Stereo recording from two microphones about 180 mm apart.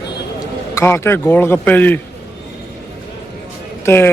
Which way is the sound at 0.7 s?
15° left (ahead or behind).